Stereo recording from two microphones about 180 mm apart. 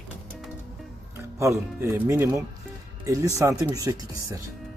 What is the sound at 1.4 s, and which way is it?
Speech, 15° right (ahead or behind).